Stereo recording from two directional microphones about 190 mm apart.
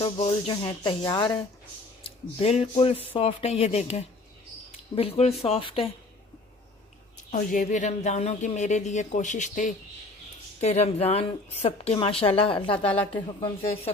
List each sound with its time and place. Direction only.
0.0 s speech: 30° left (ahead or behind)
2.0 s speech: 30° left (ahead or behind)
7.3 s speech: 40° left (ahead or behind)